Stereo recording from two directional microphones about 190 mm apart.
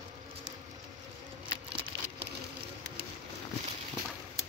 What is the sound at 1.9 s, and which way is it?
Insect, 25° right (ahead or behind).